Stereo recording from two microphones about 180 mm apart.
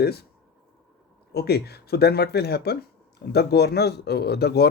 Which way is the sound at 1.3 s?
60° left (ahead or behind).